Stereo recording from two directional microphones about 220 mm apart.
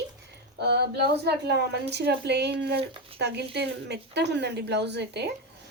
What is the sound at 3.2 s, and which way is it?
A woman's voice, 50° right (ahead or behind).